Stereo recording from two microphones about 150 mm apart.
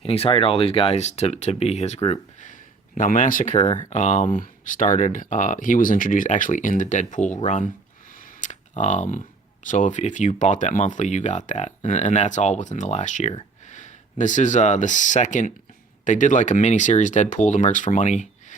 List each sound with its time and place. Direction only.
0.0 s speech: 40° left (ahead or behind)
3.0 s speech: 60° left (ahead or behind)
8.1 s a sound: 65° left (ahead or behind)
9.6 s speech: 55° left (ahead or behind)